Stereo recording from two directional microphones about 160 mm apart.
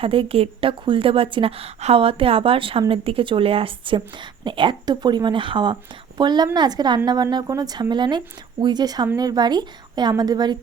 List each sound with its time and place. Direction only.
0.0 s a woman's voice: 35° right (ahead or behind)